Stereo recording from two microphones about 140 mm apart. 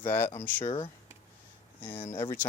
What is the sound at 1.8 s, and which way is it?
Speech, 15° left (ahead or behind).